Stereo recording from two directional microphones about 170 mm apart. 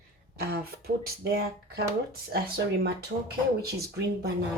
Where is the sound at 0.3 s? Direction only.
60° right (ahead or behind).